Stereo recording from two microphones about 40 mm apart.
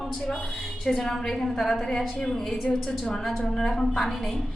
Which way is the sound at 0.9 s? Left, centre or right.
Centre.